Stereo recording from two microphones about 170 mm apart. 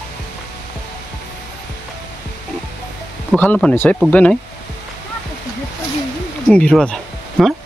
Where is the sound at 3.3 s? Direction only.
10° left (ahead or behind).